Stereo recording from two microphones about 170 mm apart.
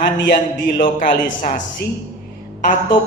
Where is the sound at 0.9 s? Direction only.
50° left (ahead or behind).